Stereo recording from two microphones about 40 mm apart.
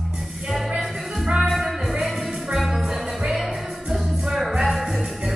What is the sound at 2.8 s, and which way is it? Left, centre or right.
Music, centre.